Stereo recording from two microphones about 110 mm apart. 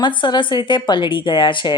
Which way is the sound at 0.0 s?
45° left (ahead or behind).